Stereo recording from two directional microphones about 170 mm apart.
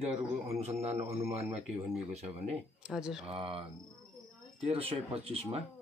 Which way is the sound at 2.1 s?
40° right (ahead or behind).